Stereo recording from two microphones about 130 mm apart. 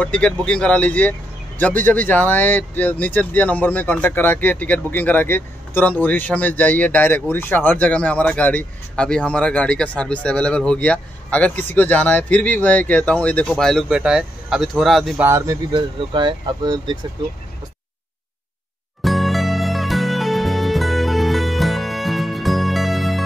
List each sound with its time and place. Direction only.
0.0 s speech: 10° left (ahead or behind)
13.8 s speech: 5° right (ahead or behind)
15.1 s speech: 20° right (ahead or behind)
15.7 s speech: 35° right (ahead or behind)
19.0 s music: centre (ahead or behind)